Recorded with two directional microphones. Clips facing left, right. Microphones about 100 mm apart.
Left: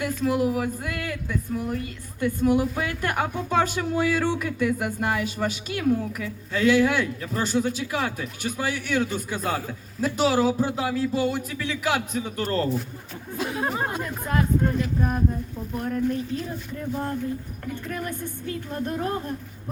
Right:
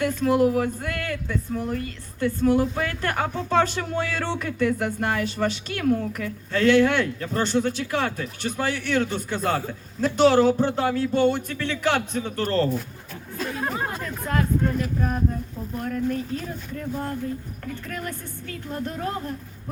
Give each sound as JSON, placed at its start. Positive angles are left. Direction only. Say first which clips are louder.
{"t": 0.0, "sound": "a woman's voice", "louder": "right 4 dB", "side_deg": 5}
{"t": 13.3, "sound": "a sound", "louder": "left 1 dB", "side_deg": 15}
{"t": 15.8, "sound": "speech", "louder": "left 1 dB", "side_deg": 20}
{"t": 17.7, "sound": "speech", "louder": "left 2 dB", "side_deg": 20}